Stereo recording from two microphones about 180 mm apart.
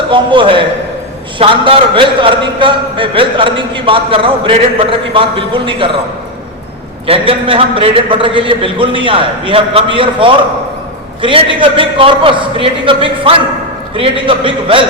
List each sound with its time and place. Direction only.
0.1 s a man's voice: 25° right (ahead or behind)
7.1 s a man's voice: 30° right (ahead or behind)